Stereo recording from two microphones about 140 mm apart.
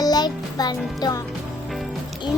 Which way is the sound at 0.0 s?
30° left (ahead or behind).